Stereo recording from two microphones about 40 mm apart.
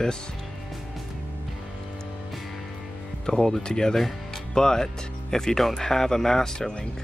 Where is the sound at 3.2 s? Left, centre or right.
Centre.